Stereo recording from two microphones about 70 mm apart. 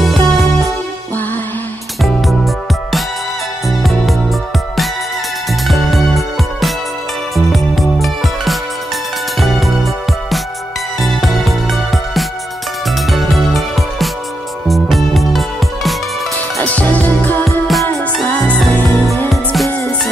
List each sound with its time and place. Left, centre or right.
0.0 s music: centre
2.0 s music: centre
5.7 s music: centre
11.0 s music: centre
16.6 s music: left
17.5 s music: centre
19.0 s music: centre